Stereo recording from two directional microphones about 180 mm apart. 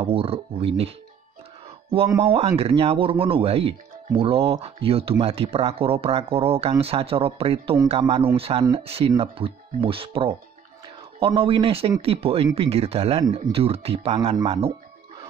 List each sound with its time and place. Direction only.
0.0 s speech: 30° right (ahead or behind)
2.2 s speech: 30° right (ahead or behind)